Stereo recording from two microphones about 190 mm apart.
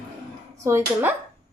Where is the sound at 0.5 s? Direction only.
15° right (ahead or behind).